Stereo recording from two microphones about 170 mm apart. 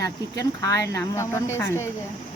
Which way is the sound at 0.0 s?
20° left (ahead or behind).